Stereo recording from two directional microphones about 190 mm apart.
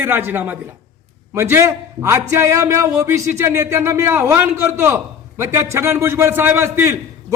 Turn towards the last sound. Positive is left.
turn(degrees=-15)  # may be behind; listen again after turning